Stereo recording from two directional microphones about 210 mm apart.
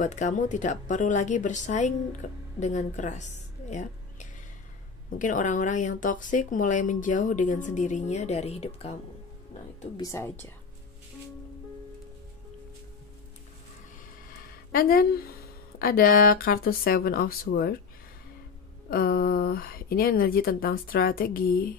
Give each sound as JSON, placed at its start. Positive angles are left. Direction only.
{"t": 0.0, "sound": "a woman's voice", "side_deg": 35}
{"t": 9.9, "sound": "speech", "side_deg": 15}
{"t": 14.7, "sound": "speech", "side_deg": 45}
{"t": 18.9, "sound": "speech", "side_deg": 45}